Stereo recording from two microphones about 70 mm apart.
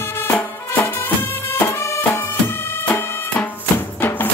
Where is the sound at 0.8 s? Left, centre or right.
Left.